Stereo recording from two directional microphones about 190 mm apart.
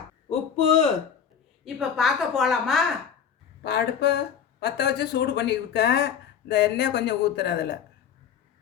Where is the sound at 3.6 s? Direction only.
60° left (ahead or behind).